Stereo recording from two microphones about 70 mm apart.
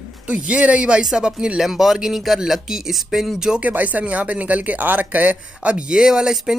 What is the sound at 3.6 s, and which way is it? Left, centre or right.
Speech, right.